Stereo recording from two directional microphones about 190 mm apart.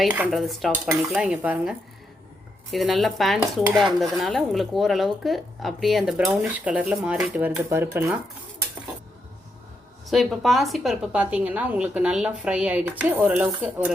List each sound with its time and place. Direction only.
0.0 s dishes: 5° right (ahead or behind)
2.7 s dishes: centre (ahead or behind)
10.1 s a woman's voice: centre (ahead or behind)